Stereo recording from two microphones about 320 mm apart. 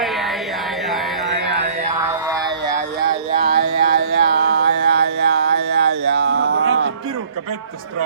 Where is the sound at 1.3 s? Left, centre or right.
Right.